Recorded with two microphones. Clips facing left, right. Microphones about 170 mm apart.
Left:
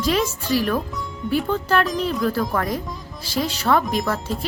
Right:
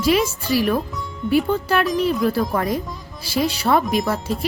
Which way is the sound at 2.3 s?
20° right (ahead or behind).